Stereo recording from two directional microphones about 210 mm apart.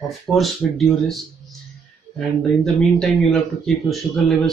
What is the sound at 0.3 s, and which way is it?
Speech, centre (ahead or behind).